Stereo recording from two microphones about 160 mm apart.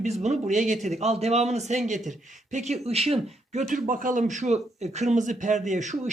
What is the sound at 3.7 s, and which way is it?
Speech, 55° right (ahead or behind).